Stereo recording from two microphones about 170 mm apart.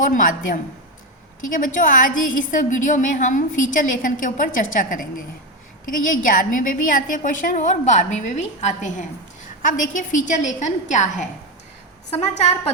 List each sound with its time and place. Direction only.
0.0 s a woman's voice: 50° left (ahead or behind)